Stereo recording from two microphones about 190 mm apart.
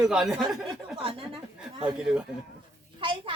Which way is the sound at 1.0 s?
30° right (ahead or behind).